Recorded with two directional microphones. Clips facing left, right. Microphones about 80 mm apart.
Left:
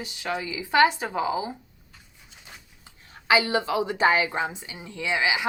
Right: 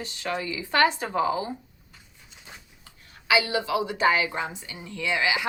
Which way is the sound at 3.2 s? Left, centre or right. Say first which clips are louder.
Left 2 dB; left.